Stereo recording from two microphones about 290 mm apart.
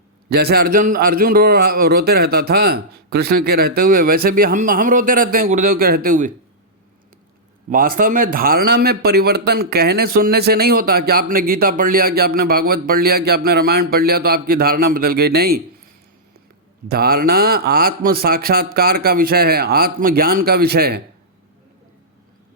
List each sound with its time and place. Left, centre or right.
0.3 s a man's voice: right
7.7 s a man's voice: right
16.9 s a man's voice: right